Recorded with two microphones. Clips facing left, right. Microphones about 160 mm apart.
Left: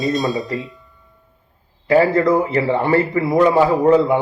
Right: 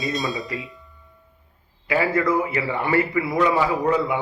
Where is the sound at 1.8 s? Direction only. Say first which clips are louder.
Left 7 dB; 40° left (ahead or behind).